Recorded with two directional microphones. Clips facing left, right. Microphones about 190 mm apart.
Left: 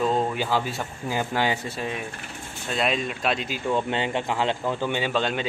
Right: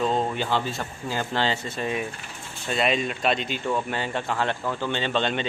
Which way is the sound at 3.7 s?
20° left (ahead or behind).